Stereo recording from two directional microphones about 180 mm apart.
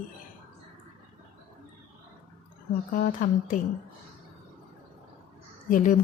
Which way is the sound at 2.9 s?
50° left (ahead or behind).